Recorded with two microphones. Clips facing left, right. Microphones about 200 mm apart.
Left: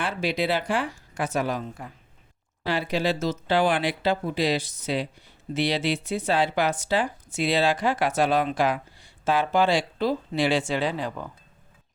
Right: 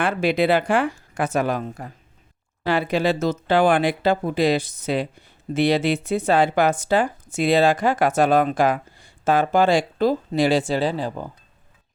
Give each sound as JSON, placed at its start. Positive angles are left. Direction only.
{"t": 0.0, "sound": "speech", "side_deg": -55}